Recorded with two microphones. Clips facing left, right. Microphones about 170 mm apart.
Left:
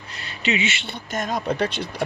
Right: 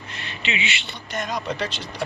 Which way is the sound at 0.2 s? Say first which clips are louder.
Left 5 dB; 40° left (ahead or behind).